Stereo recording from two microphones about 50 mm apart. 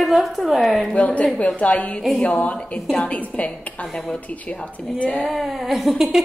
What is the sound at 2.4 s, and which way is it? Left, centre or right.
A woman's voice, left.